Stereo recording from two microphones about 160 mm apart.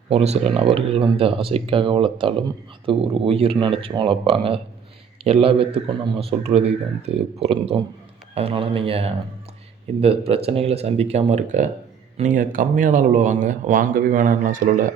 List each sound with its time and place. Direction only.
0.1 s speech: 40° right (ahead or behind)